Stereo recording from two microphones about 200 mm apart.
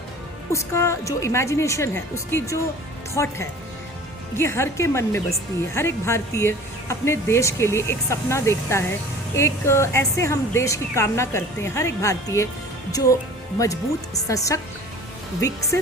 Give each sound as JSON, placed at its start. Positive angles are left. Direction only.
{"t": 0.5, "sound": "a woman's voice", "side_deg": 15}
{"t": 4.4, "sound": "a woman's voice", "side_deg": 15}
{"t": 14.3, "sound": "a woman's voice", "side_deg": 15}